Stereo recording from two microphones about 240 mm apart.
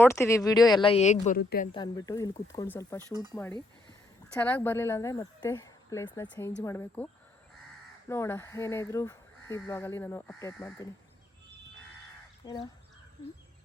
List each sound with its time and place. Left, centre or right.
0.0 s speech: centre; by 1.7 s left
1.7 s speech: centre
4.4 s speech: centre
12.4 s speech: centre